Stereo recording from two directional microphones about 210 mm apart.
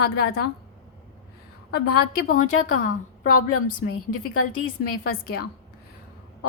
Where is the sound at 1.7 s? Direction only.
50° left (ahead or behind).